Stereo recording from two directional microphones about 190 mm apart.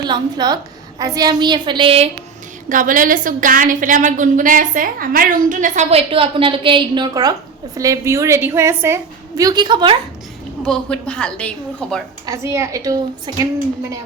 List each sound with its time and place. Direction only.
0.0 s a woman's voice: 20° right (ahead or behind)
2.6 s a woman's voice: 45° right (ahead or behind); by 9.9 s 25° right (ahead or behind)
10.6 s a woman's voice: 5° left (ahead or behind)
12.2 s a woman's voice: 15° right (ahead or behind)